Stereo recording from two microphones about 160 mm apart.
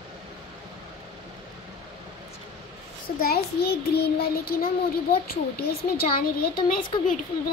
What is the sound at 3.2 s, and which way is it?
Child singing, 75° left (ahead or behind).